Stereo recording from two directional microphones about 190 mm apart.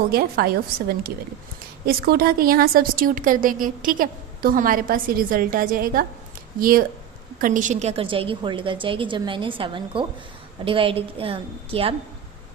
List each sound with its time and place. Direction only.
0.1 s a woman's voice: 50° right (ahead or behind)
1.9 s a woman's voice: 50° right (ahead or behind); by 11.9 s 30° right (ahead or behind)